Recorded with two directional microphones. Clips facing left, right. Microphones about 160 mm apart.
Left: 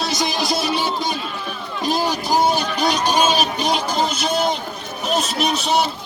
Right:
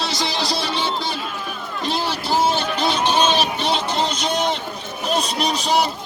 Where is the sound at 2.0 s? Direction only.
15° left (ahead or behind).